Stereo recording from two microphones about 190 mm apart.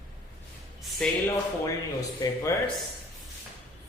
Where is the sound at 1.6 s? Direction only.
15° left (ahead or behind).